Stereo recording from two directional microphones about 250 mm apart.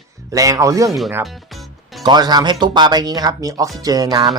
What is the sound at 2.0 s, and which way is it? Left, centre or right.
Speech, centre.